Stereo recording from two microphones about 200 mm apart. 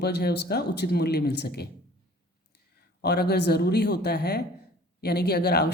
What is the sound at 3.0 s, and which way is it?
Speech, 50° left (ahead or behind).